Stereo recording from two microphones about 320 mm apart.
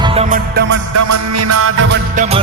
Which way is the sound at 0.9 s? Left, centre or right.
Right.